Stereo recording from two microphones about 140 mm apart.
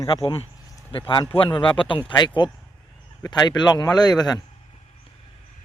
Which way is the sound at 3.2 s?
30° left (ahead or behind).